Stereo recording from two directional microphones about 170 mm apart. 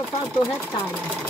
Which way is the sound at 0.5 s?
10° left (ahead or behind).